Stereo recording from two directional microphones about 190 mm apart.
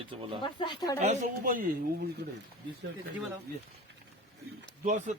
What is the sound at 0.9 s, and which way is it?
Speech, 40° right (ahead or behind).